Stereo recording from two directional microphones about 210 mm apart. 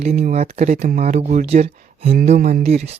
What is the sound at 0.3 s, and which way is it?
Speech, 30° right (ahead or behind).